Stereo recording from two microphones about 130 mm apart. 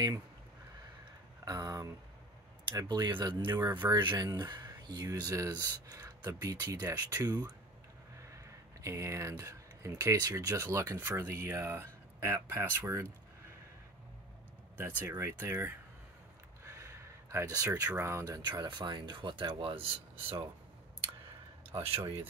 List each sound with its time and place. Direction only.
1.4 s speech: 30° right (ahead or behind)
8.8 s speech: 20° right (ahead or behind)
15.0 s speech: 20° right (ahead or behind)
16.6 s a sound: 25° right (ahead or behind)
17.8 s speech: 20° right (ahead or behind)
18.4 s speech: 35° right (ahead or behind)